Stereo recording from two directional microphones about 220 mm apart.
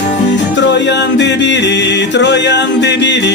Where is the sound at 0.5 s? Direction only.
50° left (ahead or behind).